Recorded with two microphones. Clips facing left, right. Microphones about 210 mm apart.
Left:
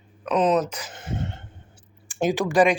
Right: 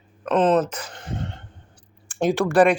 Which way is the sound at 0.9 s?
25° left (ahead or behind).